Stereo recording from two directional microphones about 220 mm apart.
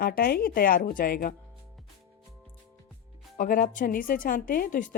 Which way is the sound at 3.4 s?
35° left (ahead or behind).